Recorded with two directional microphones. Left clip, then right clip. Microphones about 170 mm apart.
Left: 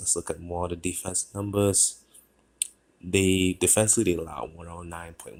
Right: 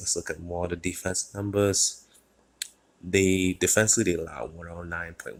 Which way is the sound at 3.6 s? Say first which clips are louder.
Right 1 dB; 10° left (ahead or behind).